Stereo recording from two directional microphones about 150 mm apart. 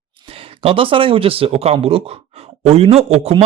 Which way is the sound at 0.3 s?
40° right (ahead or behind).